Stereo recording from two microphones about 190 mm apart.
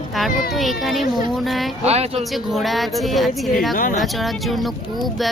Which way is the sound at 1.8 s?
35° right (ahead or behind).